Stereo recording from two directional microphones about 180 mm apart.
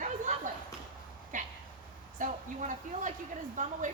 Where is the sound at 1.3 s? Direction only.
45° right (ahead or behind).